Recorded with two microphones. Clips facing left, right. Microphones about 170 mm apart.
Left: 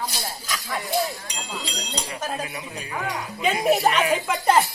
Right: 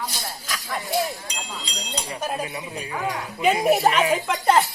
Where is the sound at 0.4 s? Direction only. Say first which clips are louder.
Even; centre (ahead or behind).